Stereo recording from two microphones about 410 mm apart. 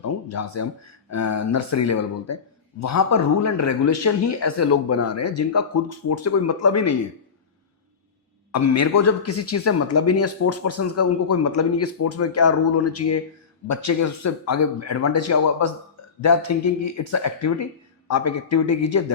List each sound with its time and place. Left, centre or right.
0.0 s a sound: left
1.1 s a man's voice: left
8.5 s a man's voice: left